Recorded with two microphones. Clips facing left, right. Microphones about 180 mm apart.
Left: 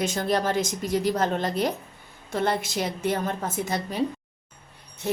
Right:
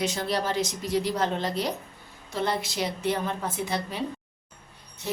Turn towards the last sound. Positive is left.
turn(degrees=50)  # may be behind; listen again after turning